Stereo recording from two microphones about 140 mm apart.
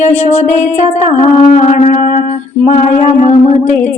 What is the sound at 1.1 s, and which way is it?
Music, 55° left (ahead or behind).